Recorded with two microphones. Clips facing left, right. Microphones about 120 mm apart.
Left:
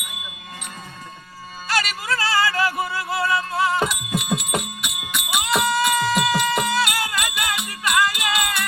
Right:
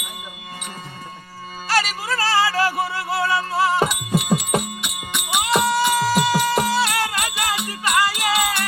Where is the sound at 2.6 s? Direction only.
30° right (ahead or behind).